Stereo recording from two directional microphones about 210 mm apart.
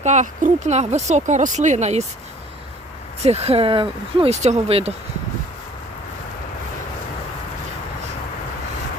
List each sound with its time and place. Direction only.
0.0 s speech: 35° right (ahead or behind)
3.2 s speech: 30° right (ahead or behind)